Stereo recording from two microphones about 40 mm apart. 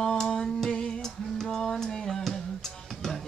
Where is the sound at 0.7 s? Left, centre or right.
Centre.